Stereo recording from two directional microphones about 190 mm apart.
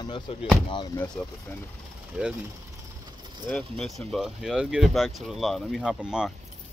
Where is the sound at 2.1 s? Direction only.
5° right (ahead or behind).